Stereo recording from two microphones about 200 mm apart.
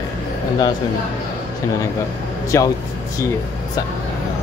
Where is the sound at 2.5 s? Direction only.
15° left (ahead or behind).